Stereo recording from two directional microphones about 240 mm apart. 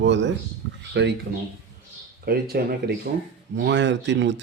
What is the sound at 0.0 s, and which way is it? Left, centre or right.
Speech, right.